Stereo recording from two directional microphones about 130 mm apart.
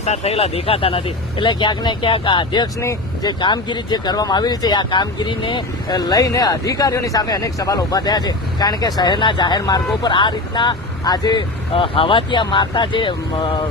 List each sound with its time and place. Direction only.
0.0 s speech: 55° left (ahead or behind); by 13.7 s 40° left (ahead or behind)